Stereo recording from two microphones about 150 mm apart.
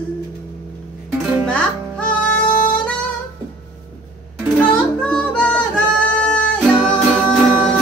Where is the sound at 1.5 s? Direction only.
10° left (ahead or behind).